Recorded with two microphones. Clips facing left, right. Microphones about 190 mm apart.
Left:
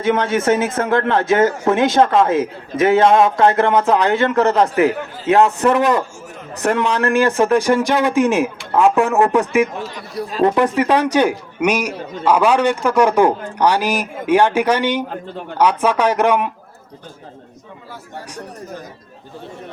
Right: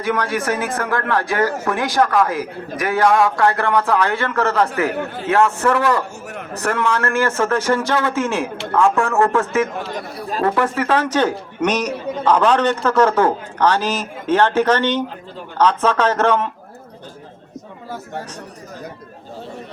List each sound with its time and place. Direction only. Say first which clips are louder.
0.0 s a man's voice: left 4 dB; 25° left (ahead or behind)
9.9 s speech: even; 45° right (ahead or behind)
10.4 s a man's voice: left 4 dB; 20° left (ahead or behind)